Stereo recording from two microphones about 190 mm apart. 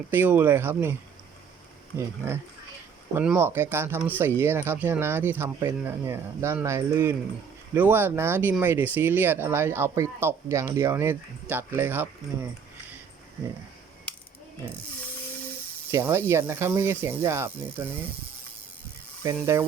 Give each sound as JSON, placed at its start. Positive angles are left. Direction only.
{"t": 0.1, "sound": "speech", "side_deg": -10}
{"t": 2.0, "sound": "speech", "side_deg": -15}
{"t": 15.9, "sound": "speech", "side_deg": -15}
{"t": 19.2, "sound": "speech", "side_deg": -15}